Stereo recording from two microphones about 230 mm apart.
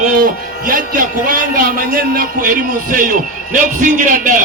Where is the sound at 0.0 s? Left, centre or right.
Right.